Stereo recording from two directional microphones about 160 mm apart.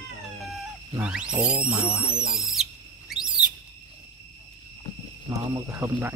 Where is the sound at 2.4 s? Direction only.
Centre (ahead or behind).